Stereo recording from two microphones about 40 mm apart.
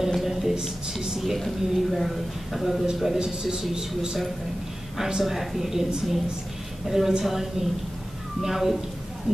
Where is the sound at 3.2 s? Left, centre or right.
Centre.